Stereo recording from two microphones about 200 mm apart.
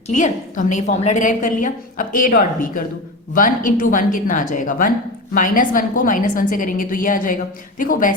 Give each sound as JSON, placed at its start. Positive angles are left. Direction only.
{"t": 0.1, "sound": "a woman's voice", "side_deg": 40}